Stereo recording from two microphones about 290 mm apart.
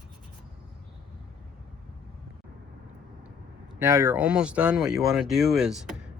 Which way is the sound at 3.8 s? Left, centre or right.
Centre.